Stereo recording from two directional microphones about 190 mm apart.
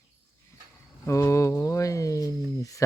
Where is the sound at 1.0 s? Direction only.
15° left (ahead or behind).